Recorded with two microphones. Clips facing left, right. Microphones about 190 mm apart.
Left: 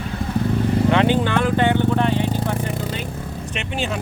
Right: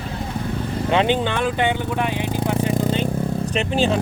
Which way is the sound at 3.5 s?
35° right (ahead or behind).